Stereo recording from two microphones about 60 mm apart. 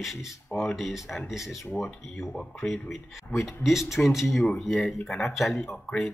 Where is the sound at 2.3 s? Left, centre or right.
Centre.